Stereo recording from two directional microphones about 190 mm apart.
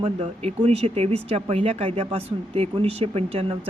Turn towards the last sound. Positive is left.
turn(degrees=-30)  # may be behind; listen again after turning